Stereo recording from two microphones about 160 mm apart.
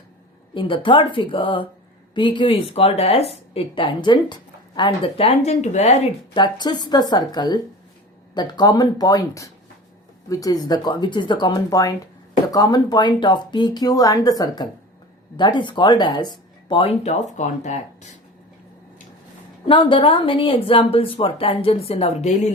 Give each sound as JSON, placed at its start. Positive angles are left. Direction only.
{"t": 0.5, "sound": "a woman's voice", "side_deg": 30}
{"t": 6.3, "sound": "speech", "side_deg": 30}
{"t": 19.6, "sound": "a woman's voice", "side_deg": 30}